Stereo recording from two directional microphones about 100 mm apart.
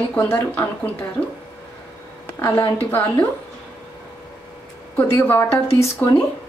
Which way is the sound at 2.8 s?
20° left (ahead or behind).